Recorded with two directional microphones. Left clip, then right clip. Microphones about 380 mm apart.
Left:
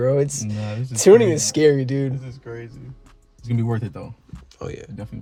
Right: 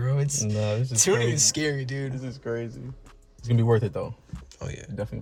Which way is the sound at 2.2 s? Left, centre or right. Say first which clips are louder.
Right 4 dB; right.